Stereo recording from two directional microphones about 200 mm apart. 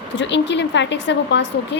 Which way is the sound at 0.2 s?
60° left (ahead or behind).